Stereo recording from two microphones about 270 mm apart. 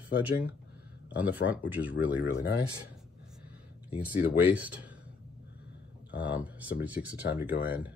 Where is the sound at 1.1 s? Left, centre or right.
Centre.